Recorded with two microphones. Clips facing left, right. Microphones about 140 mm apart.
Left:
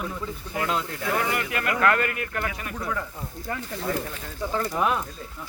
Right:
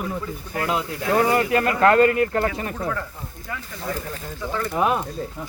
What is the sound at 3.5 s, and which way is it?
Speech, 40° left (ahead or behind).